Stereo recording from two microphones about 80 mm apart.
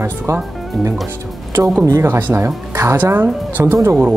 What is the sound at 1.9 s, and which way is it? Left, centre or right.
Speech, right.